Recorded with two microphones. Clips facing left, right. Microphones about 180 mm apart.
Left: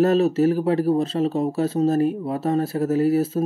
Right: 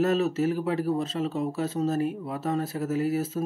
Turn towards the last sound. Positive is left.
turn(degrees=30)  # may be behind; listen again after turning